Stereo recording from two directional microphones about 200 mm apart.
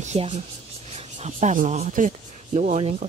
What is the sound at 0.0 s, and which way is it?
Speech, 35° right (ahead or behind).